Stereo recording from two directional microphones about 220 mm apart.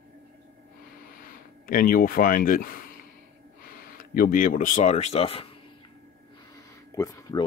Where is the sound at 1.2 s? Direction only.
40° left (ahead or behind).